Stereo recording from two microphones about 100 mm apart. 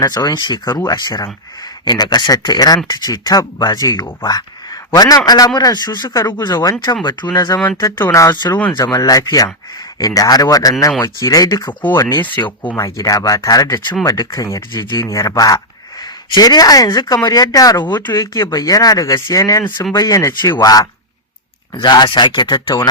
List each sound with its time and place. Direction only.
0.0 s speech: 40° left (ahead or behind)
7.8 s speech: 30° left (ahead or behind)
12.4 s speech: 15° left (ahead or behind)
12.7 s speech: 35° left (ahead or behind)